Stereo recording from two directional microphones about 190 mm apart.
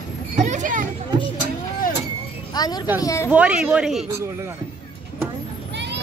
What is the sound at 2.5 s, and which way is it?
Speech, 20° left (ahead or behind).